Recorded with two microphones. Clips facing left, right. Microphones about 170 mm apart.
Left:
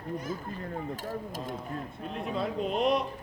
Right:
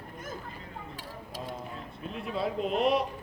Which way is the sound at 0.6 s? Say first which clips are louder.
Left 8 dB; 45° left (ahead or behind).